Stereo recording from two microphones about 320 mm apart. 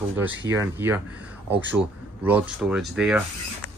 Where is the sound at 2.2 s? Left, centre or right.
Centre.